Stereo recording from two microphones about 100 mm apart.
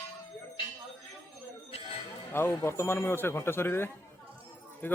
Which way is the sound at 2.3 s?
25° left (ahead or behind).